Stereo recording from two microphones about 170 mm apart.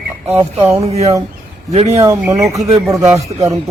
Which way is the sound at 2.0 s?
15° right (ahead or behind).